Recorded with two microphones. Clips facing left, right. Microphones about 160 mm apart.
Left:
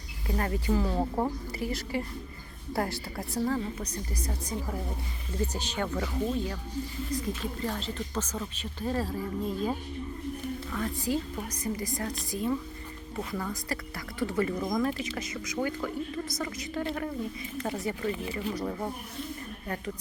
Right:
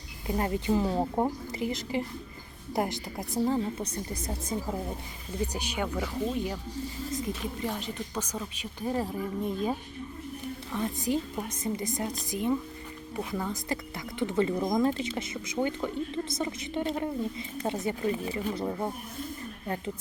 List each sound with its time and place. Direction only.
0.3 s speech: 20° right (ahead or behind)
5.5 s speech: 10° right (ahead or behind)